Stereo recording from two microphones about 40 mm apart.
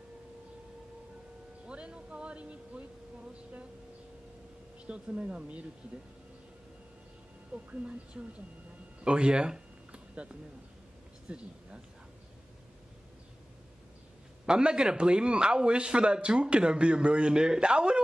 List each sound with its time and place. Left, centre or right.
1.7 s speech: right
4.8 s a man's voice: right
7.5 s a man's voice: right
9.0 s a sound: right
11.2 s speech: right
14.4 s a man's voice: right